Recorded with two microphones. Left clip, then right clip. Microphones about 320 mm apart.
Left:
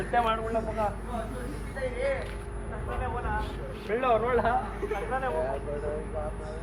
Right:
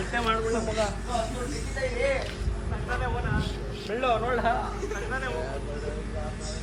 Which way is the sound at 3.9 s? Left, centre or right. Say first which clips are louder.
Left 1 dB; left.